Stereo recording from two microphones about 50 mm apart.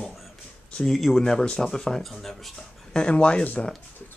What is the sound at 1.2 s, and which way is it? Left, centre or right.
Speech, centre.